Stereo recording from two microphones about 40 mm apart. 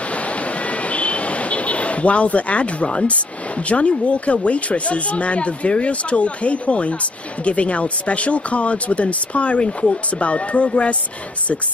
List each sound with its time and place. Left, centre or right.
0.7 s vehicle: left
3.6 s speech: left